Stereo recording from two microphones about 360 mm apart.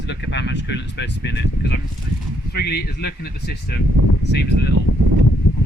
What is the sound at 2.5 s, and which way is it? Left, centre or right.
Speech, left.